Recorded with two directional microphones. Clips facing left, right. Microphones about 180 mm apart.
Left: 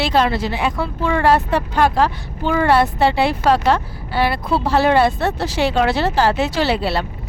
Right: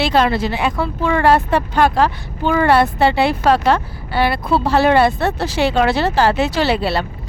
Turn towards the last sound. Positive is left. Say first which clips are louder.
# right 1 dB
turn(degrees=-65)  # may be behind; listen again after turning